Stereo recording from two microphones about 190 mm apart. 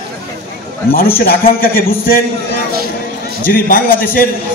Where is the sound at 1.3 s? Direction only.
50° left (ahead or behind).